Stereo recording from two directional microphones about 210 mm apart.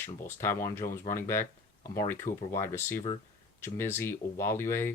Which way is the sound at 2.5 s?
10° left (ahead or behind).